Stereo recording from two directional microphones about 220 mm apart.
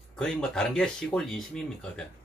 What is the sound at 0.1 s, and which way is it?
Speech, 5° left (ahead or behind).